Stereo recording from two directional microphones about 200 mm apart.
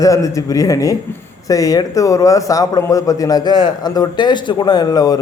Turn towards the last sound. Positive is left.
turn(degrees=20)  # may be behind; listen again after turning